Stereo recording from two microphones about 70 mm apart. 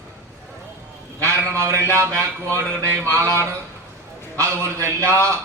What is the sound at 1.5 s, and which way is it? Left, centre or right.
A man's voice, right.